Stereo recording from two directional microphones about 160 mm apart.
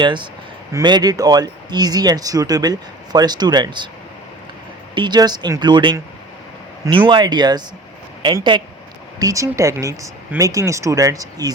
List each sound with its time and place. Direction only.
0.0 s speech: 30° right (ahead or behind)
4.9 s speech: 25° right (ahead or behind)
7.1 s speech: 30° right (ahead or behind)